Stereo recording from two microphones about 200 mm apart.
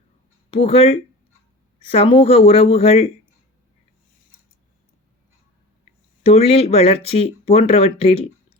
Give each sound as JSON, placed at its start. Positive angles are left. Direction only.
{"t": 0.5, "sound": "speech", "side_deg": 30}
{"t": 6.2, "sound": "speech", "side_deg": 30}